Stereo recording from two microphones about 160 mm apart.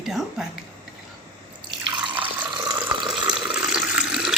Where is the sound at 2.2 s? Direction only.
30° right (ahead or behind).